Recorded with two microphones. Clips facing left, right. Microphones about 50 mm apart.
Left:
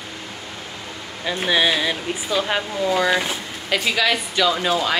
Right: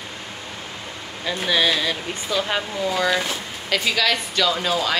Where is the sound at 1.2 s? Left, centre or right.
Centre.